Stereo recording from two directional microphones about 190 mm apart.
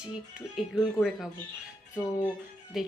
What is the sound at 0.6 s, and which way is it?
Speech, centre (ahead or behind).